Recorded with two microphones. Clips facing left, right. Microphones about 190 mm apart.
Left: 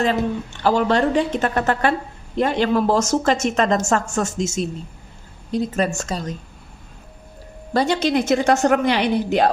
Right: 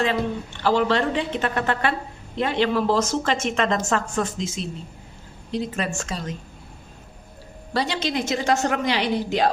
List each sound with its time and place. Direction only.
0.6 s a woman's voice: 45° left (ahead or behind)
7.7 s a woman's voice: 45° left (ahead or behind)